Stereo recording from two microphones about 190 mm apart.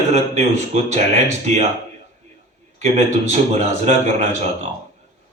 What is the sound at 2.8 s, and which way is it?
A man's voice, 35° right (ahead or behind).